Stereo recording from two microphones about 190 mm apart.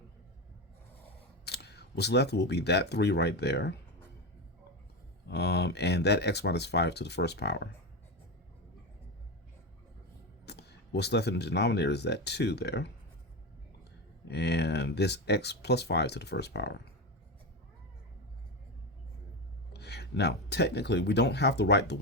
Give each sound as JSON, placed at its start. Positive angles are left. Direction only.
{"t": 1.5, "sound": "speech", "side_deg": 60}
{"t": 5.3, "sound": "speech", "side_deg": 60}
{"t": 10.4, "sound": "speech", "side_deg": 60}
{"t": 14.3, "sound": "speech", "side_deg": 60}
{"t": 19.7, "sound": "speech", "side_deg": 60}